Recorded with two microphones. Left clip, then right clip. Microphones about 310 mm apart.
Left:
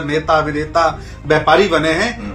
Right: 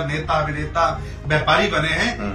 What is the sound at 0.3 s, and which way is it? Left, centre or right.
Speech, centre.